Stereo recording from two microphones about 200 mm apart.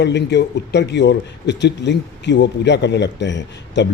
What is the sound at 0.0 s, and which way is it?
Speech, 60° left (ahead or behind).